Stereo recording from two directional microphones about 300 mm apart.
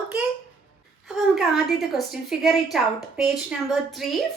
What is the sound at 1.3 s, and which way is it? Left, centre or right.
A woman's voice, centre.